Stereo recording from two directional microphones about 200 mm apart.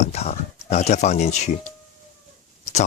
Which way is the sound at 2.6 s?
35° left (ahead or behind).